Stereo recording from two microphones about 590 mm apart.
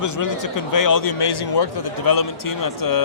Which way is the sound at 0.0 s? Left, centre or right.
Left.